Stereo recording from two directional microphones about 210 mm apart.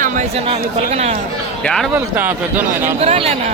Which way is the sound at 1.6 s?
5° left (ahead or behind).